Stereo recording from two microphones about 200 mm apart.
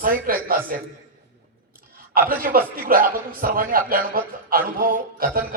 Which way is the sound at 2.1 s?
45° right (ahead or behind).